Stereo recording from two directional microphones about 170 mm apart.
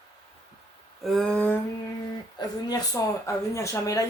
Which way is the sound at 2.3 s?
25° left (ahead or behind).